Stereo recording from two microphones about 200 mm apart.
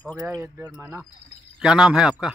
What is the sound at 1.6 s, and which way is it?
Speech, 5° right (ahead or behind).